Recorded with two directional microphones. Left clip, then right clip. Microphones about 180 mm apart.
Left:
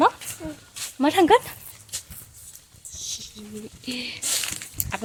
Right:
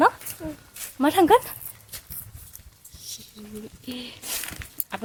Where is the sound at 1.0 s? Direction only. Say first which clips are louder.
Even; 5° left (ahead or behind).